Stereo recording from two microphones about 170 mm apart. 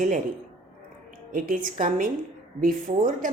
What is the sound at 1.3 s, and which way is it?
A woman's voice, 55° right (ahead or behind).